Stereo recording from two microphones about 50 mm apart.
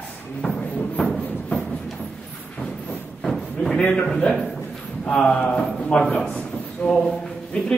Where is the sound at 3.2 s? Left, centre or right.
Centre.